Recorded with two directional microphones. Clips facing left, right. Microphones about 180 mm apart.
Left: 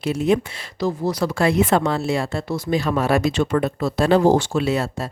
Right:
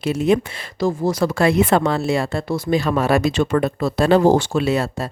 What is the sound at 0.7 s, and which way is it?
Speech, 45° right (ahead or behind).